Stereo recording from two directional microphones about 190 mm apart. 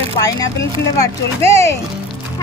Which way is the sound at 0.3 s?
15° left (ahead or behind).